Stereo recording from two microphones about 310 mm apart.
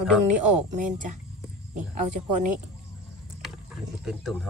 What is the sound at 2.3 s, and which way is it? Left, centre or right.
Speech, right.